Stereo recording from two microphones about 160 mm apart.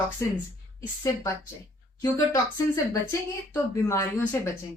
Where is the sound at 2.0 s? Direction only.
20° left (ahead or behind).